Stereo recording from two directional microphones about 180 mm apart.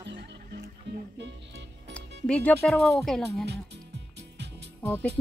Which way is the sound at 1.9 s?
5° left (ahead or behind).